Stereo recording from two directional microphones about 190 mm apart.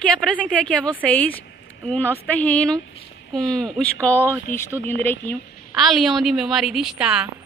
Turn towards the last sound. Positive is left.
turn(degrees=-5)  # may be behind; listen again after turning